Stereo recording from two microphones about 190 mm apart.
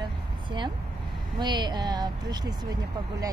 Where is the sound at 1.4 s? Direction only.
25° right (ahead or behind).